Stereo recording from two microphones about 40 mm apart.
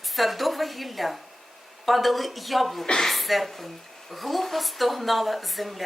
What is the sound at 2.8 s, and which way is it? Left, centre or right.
Speech, centre.